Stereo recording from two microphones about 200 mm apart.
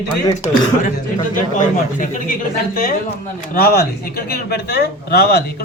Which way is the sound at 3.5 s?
50° left (ahead or behind).